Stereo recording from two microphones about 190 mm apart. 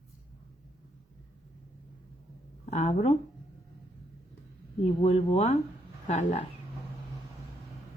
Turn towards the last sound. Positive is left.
turn(degrees=35)  # may be behind; listen again after turning